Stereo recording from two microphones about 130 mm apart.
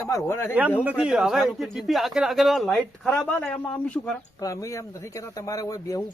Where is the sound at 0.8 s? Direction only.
10° right (ahead or behind); by 4.1 s 10° left (ahead or behind).